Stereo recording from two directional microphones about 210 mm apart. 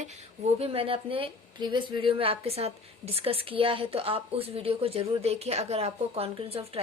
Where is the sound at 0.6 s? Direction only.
25° right (ahead or behind).